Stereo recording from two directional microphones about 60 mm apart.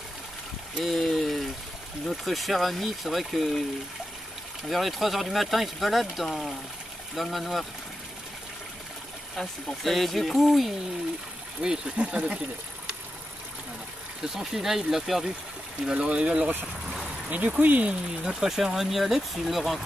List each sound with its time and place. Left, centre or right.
0.9 s a sound: centre
2.0 s speech: centre
4.6 s speech: centre
9.4 s speech: centre
11.6 s speech: centre
14.3 s speech: centre; by 17.9 s right
18.2 s speech: centre